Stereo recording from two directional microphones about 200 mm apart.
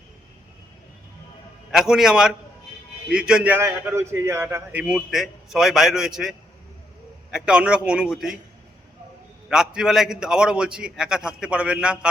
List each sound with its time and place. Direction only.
1.7 s a man's voice: centre (ahead or behind)
9.5 s a man's voice: 5° right (ahead or behind)